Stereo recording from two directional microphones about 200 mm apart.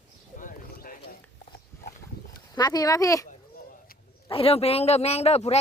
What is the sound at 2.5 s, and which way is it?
Speech, 20° left (ahead or behind).